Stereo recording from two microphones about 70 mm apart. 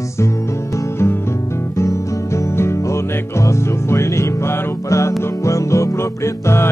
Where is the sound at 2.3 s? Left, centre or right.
Left.